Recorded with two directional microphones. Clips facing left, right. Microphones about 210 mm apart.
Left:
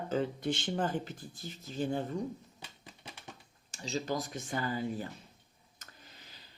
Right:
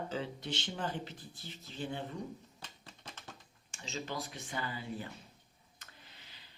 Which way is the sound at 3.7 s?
35° left (ahead or behind).